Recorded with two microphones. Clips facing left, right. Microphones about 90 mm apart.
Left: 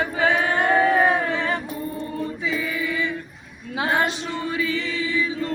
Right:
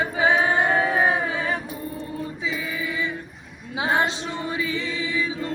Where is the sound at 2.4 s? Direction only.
15° right (ahead or behind).